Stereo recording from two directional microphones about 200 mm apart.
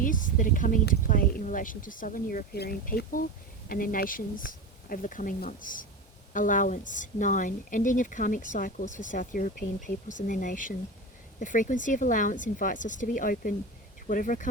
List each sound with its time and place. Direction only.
0.0 s a woman's voice: 40° left (ahead or behind)